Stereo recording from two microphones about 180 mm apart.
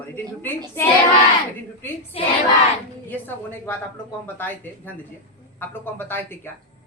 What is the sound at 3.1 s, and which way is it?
Speech, 10° left (ahead or behind).